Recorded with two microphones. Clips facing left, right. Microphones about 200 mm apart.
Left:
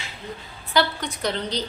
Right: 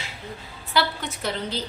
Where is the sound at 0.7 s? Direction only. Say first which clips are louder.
Left 2 dB; 5° right (ahead or behind).